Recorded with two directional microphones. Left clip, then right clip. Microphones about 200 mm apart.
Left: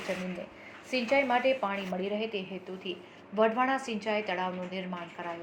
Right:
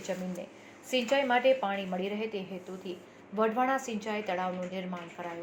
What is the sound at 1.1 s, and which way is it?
A woman's voice, 35° right (ahead or behind).